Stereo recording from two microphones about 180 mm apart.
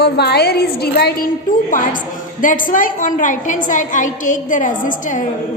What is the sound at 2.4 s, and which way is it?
A woman's voice, 45° left (ahead or behind).